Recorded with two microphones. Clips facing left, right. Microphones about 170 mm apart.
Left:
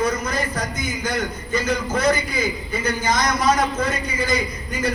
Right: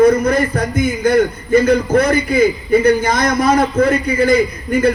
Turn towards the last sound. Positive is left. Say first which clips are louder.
# right 10 dB
turn(degrees=-60)  # may be behind; listen again after turning